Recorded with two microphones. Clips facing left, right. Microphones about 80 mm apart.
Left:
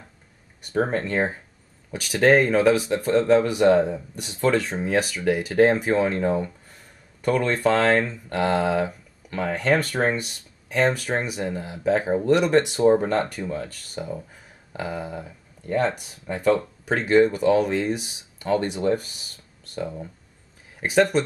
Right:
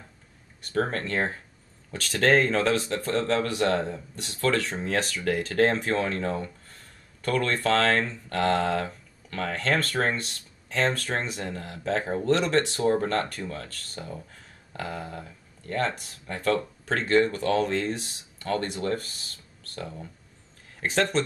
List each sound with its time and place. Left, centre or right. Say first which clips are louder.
0.6 s speech: left 4 dB; centre